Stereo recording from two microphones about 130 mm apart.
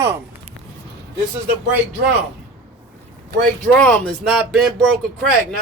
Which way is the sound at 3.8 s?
10° left (ahead or behind).